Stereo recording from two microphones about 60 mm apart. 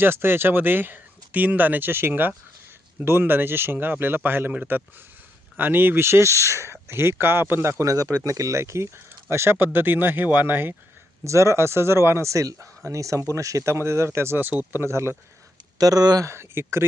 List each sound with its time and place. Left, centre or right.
0.0 s speech: right
7.9 s speech: right
11.2 s speech: right
15.8 s speech: right
16.3 s speech: right